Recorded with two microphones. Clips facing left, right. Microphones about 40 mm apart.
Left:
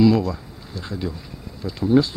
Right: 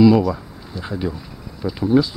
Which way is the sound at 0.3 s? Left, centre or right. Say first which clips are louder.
Right 5 dB; right.